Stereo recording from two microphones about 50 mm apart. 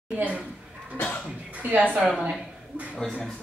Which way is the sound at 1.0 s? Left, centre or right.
Left.